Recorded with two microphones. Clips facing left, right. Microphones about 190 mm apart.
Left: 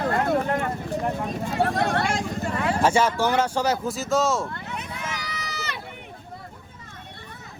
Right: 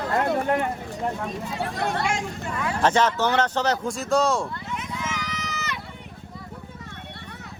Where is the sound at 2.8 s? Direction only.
10° left (ahead or behind).